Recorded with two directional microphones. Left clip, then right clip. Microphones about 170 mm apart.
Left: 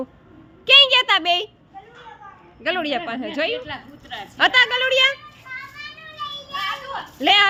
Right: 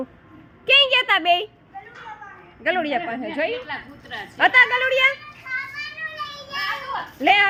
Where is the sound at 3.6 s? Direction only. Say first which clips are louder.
Right 1 dB; 70° left (ahead or behind).